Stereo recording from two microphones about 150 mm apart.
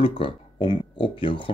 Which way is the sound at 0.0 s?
35° left (ahead or behind).